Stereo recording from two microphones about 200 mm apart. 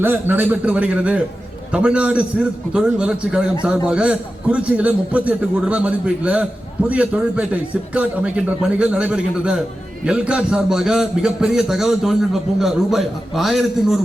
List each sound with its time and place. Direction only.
0.0 s a man's voice: 10° right (ahead or behind)